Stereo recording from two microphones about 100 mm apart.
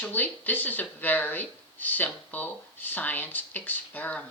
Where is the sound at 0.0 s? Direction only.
15° left (ahead or behind).